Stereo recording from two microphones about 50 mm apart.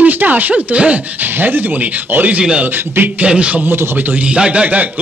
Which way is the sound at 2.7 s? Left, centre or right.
Right.